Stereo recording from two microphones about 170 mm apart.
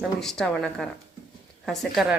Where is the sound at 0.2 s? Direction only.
5° left (ahead or behind).